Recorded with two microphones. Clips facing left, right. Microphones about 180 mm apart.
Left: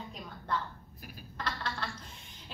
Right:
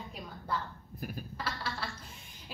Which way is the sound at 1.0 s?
50° right (ahead or behind).